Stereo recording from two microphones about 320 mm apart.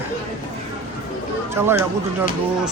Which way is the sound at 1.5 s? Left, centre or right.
Centre.